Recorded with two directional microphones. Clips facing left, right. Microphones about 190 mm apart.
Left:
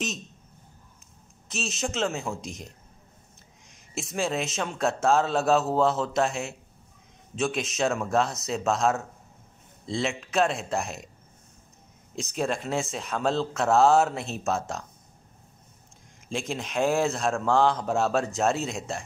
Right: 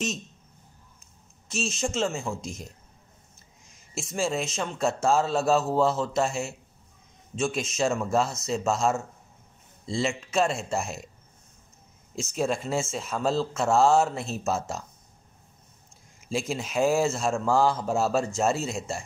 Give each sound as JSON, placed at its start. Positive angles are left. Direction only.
{"t": 1.5, "sound": "a man's voice", "side_deg": 0}
{"t": 12.2, "sound": "a man's voice", "side_deg": 0}
{"t": 16.3, "sound": "a man's voice", "side_deg": -5}